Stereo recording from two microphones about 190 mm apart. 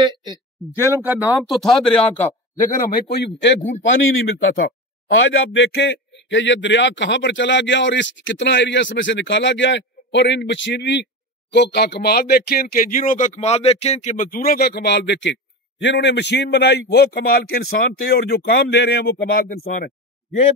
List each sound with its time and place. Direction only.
0.0 s speech: 25° right (ahead or behind)
0.9 s speech: 10° right (ahead or behind); by 2.3 s 5° left (ahead or behind)
2.6 s speech: 45° left (ahead or behind)
3.3 s a man's voice: 70° left (ahead or behind)
3.8 s a man's voice: 80° left
5.2 s a man's voice: 70° left (ahead or behind); by 19.9 s 45° left (ahead or behind)